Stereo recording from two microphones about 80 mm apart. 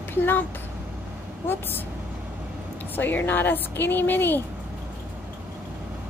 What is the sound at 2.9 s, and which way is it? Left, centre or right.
A woman's voice, left.